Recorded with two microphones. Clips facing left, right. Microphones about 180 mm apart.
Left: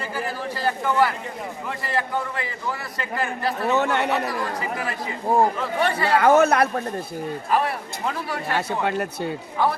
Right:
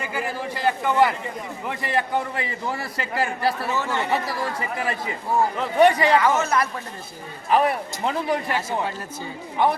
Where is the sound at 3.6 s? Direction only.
65° left (ahead or behind).